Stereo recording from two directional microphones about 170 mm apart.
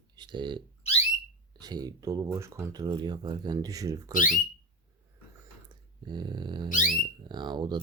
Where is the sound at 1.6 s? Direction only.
25° right (ahead or behind).